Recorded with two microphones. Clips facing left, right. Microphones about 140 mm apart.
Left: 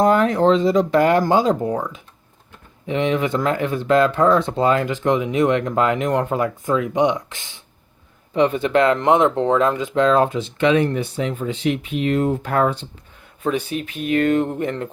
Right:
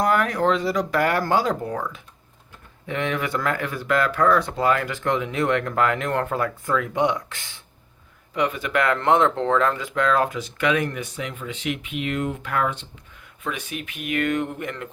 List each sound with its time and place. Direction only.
0.0 s speech: 25° left (ahead or behind)